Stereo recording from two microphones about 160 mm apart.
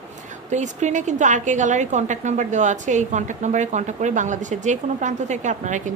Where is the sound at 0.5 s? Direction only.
45° right (ahead or behind).